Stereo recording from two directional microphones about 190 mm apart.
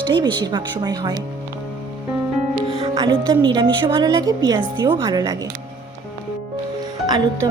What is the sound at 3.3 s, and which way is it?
A woman's voice, 25° right (ahead or behind).